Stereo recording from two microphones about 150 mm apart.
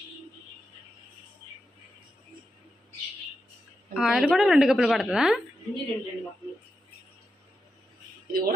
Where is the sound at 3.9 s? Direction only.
5° right (ahead or behind).